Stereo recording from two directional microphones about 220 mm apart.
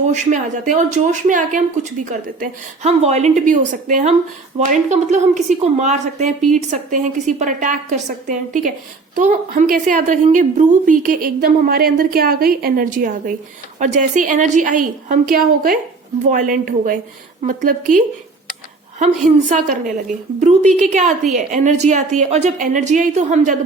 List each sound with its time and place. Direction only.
0.1 s a woman's voice: 35° right (ahead or behind)
19.5 s a woman's voice: 35° right (ahead or behind)